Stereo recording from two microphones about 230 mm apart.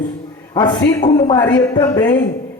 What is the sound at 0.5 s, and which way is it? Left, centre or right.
A man's voice, centre.